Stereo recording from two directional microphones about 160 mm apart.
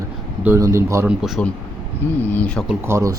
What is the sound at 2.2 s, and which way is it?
Speech, 10° left (ahead or behind).